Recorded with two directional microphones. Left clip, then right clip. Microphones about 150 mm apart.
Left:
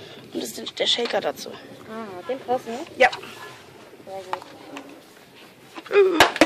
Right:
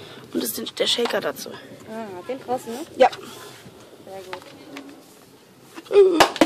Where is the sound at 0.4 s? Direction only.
40° right (ahead or behind).